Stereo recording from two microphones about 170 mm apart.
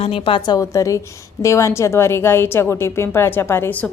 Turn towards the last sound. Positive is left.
turn(degrees=15)  # may be behind; listen again after turning